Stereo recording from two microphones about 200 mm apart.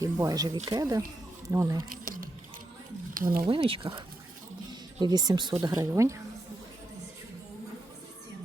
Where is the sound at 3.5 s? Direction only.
25° right (ahead or behind).